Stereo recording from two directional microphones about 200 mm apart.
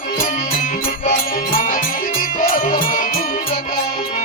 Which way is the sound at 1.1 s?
40° left (ahead or behind).